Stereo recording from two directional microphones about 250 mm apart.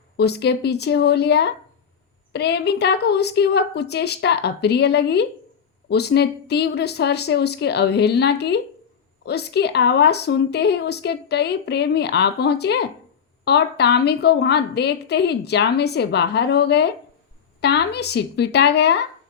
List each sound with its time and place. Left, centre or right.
0.2 s speech: left